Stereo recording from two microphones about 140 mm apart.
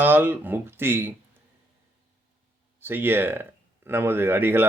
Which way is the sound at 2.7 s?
15° right (ahead or behind).